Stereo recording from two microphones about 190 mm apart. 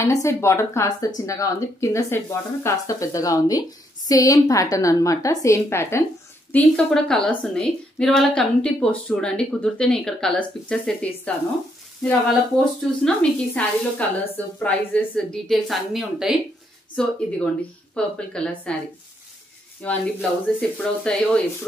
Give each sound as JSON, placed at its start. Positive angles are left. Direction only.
{"t": 0.0, "sound": "a woman's voice", "side_deg": 15}
{"t": 19.8, "sound": "a woman's voice", "side_deg": 10}